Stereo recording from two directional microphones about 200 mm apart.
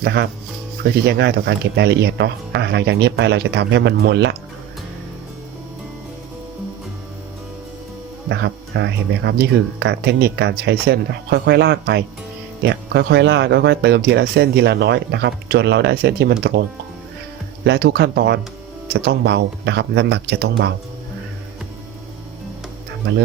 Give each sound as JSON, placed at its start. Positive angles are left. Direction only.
{"t": 0.0, "sound": "speech", "side_deg": -55}
{"t": 8.3, "sound": "speech", "side_deg": -60}